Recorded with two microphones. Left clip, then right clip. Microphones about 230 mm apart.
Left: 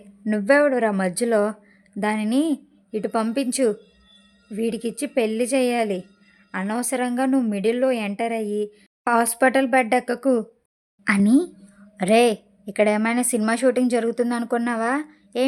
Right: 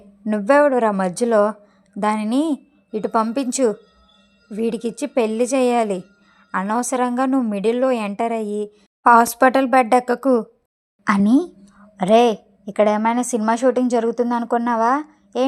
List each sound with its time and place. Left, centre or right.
0.3 s a woman's voice: centre
8.4 s a woman's voice: right
9.0 s a woman's voice: centre